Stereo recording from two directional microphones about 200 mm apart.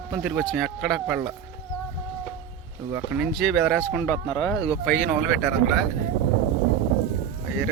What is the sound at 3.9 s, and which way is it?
Speech, 15° left (ahead or behind).